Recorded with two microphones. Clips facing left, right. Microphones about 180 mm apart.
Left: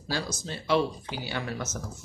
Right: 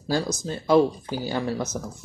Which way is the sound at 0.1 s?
45° right (ahead or behind).